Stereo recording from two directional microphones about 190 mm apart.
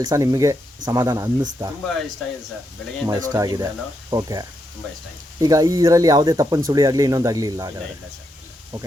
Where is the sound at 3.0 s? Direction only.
15° right (ahead or behind).